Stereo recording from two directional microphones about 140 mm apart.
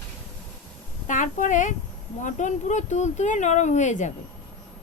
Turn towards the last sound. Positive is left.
turn(degrees=60)  # may be behind; listen again after turning